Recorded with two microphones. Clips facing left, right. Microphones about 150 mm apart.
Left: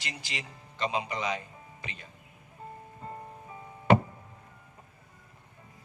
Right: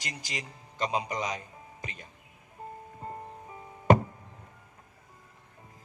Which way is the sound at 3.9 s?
45° right (ahead or behind).